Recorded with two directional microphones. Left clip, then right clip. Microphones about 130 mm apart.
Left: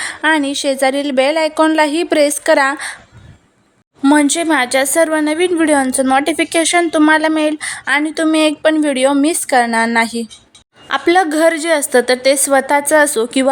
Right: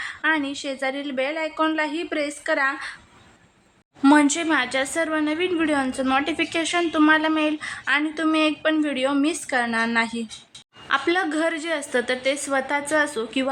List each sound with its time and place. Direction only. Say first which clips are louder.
0.0 s a woman's voice: left 8 dB; 65° left (ahead or behind)
4.1 s a woman's voice: left 5 dB; 25° left (ahead or behind)
4.4 s a woman's voice: left 8 dB; 45° left (ahead or behind)
11.1 s a woman's voice: left 16 dB; 50° left (ahead or behind)